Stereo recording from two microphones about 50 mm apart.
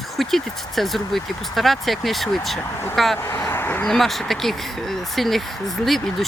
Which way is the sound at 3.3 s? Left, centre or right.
Left.